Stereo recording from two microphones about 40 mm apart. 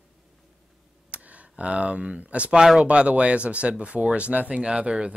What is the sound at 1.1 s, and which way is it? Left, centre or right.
Speech, right.